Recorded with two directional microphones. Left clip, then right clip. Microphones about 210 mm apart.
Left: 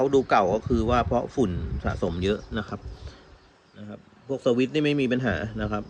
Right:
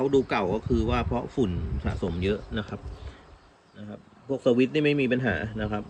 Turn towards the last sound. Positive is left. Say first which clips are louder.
# left 1 dB
turn(degrees=15)  # may be behind; listen again after turning